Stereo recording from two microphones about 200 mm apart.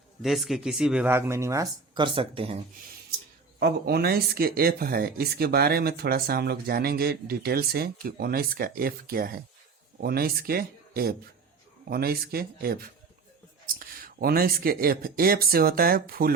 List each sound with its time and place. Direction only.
0.2 s speech: centre (ahead or behind); by 2.6 s 25° right (ahead or behind)
3.6 s speech: 50° right (ahead or behind)